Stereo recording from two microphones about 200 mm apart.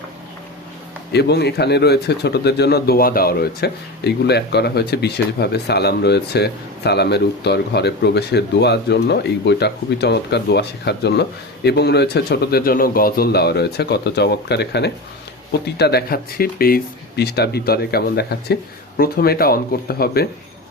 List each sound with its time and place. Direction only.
1.1 s speech: 55° left (ahead or behind)